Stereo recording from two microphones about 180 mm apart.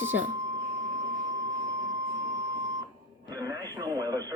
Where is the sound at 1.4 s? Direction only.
20° right (ahead or behind).